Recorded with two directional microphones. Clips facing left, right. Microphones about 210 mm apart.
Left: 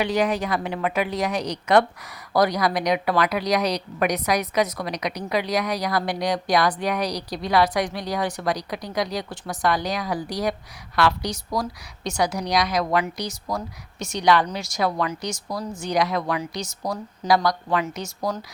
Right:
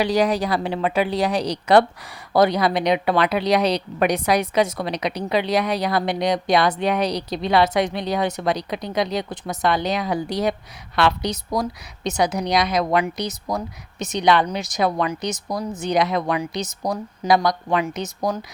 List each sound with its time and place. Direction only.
0.0 s a woman's voice: 35° right (ahead or behind); by 18.3 s 20° right (ahead or behind)